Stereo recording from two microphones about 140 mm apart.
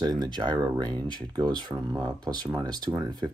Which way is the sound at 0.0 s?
30° right (ahead or behind).